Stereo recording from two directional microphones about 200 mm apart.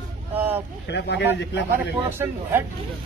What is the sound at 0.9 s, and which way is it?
Speech, 55° left (ahead or behind).